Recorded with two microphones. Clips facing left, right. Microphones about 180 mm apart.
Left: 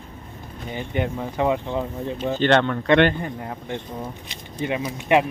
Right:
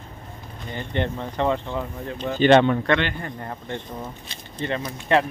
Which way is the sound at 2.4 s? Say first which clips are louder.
Right 4 dB; 15° right (ahead or behind).